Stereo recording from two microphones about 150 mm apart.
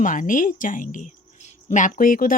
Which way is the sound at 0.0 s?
60° left (ahead or behind).